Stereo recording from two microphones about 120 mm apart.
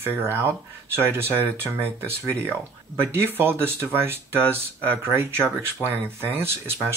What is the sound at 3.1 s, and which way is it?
Speech, 20° right (ahead or behind).